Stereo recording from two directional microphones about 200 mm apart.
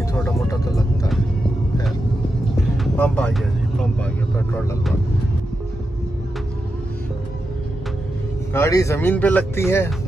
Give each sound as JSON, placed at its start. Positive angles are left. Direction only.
{"t": 0.5, "sound": "speech", "side_deg": 15}
{"t": 2.8, "sound": "speech", "side_deg": 5}
{"t": 8.5, "sound": "speech", "side_deg": 15}